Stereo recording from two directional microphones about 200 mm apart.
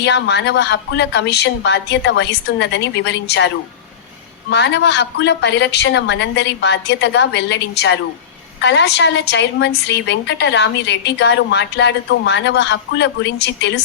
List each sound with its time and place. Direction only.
0.0 s a woman's voice: 60° left (ahead or behind)